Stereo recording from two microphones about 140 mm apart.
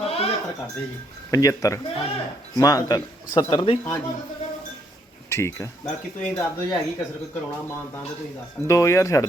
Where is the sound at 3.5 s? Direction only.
40° left (ahead or behind).